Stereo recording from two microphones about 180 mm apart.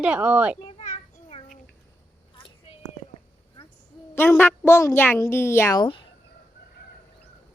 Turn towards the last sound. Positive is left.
turn(degrees=30)  # may be behind; listen again after turning